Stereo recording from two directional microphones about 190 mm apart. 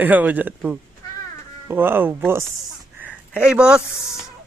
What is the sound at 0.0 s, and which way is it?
A child's voice, 10° right (ahead or behind).